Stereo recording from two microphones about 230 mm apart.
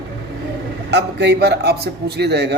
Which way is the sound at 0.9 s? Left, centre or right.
Right.